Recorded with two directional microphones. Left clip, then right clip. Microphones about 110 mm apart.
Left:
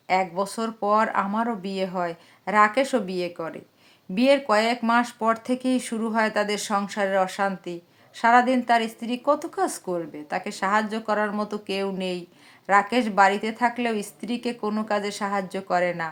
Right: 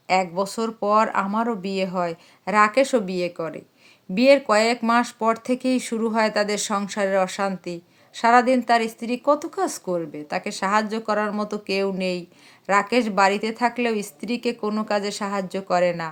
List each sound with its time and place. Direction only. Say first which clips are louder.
0.1 s speech: right 2 dB; 35° right (ahead or behind)